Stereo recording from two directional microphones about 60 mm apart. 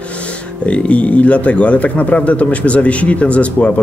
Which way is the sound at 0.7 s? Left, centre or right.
Left.